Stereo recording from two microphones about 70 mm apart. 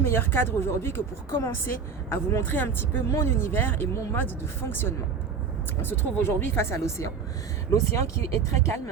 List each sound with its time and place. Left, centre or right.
0.0 s speech: left